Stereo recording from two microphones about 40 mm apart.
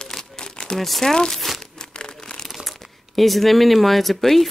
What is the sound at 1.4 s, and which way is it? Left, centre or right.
Crumpling, centre.